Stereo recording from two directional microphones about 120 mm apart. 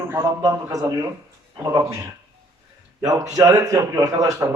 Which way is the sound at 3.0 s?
30° right (ahead or behind).